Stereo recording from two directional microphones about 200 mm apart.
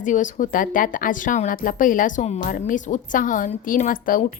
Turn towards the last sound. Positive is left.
turn(degrees=45)  # may be behind; listen again after turning